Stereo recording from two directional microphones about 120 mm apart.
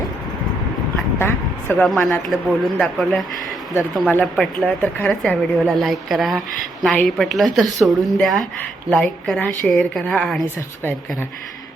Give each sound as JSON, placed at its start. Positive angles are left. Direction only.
{"t": 1.2, "sound": "speech", "side_deg": 20}
{"t": 1.9, "sound": "speech", "side_deg": 0}
{"t": 4.1, "sound": "a woman's voice", "side_deg": 10}